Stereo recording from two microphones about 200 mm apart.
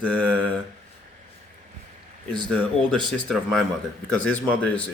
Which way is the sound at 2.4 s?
25° right (ahead or behind).